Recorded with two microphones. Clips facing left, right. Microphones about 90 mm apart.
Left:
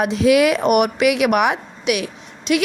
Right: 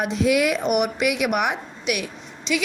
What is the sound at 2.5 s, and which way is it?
Speech, 55° left (ahead or behind).